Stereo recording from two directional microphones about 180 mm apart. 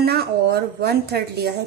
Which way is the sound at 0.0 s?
60° right (ahead or behind).